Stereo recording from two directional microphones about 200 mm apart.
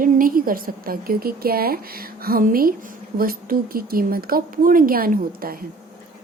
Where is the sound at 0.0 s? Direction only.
45° right (ahead or behind).